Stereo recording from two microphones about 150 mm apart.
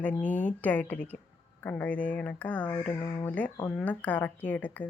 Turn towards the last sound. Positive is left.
turn(degrees=10)  # may be behind; listen again after turning